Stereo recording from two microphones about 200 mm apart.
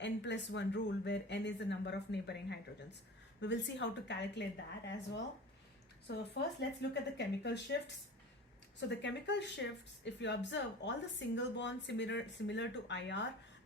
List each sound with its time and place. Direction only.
0.0 s speech: 60° left (ahead or behind)
6.1 s speech: 60° left (ahead or behind)
8.8 s speech: 60° left (ahead or behind)